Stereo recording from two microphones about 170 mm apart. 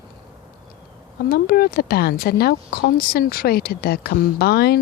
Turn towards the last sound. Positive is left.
turn(degrees=70)  # may be behind; listen again after turning